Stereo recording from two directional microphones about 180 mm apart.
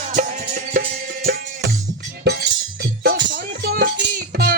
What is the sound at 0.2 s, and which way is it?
Music, 45° right (ahead or behind).